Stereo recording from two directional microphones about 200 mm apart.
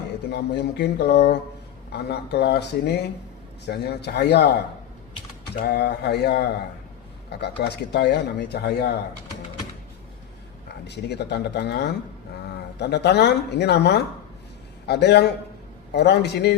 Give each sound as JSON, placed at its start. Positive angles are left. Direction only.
{"t": 0.3, "sound": "speech", "side_deg": 55}
{"t": 5.5, "sound": "speech", "side_deg": 55}
{"t": 10.7, "sound": "speech", "side_deg": 60}